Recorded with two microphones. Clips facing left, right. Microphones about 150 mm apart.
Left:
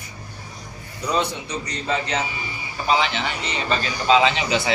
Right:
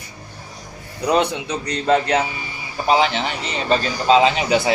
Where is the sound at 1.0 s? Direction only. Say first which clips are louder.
Right 5 dB; 65° right (ahead or behind).